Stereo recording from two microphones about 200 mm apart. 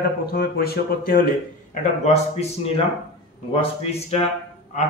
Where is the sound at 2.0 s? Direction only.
35° left (ahead or behind).